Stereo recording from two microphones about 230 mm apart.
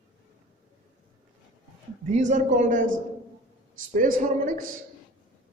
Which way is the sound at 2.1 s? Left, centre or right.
Right.